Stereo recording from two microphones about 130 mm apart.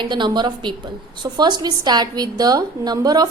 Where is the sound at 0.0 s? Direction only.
35° right (ahead or behind).